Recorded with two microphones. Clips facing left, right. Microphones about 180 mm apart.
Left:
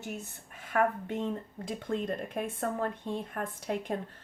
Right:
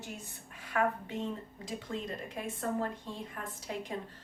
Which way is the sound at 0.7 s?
55° left (ahead or behind).